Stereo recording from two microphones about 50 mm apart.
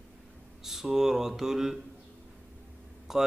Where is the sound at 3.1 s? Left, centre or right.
Centre.